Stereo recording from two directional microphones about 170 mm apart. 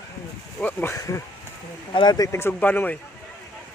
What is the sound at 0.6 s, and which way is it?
Speech, 10° left (ahead or behind).